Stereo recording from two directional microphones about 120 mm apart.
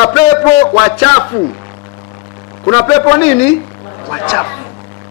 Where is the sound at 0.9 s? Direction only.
15° left (ahead or behind).